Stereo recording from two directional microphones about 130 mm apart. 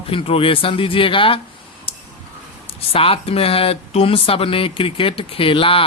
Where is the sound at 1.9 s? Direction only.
45° left (ahead or behind).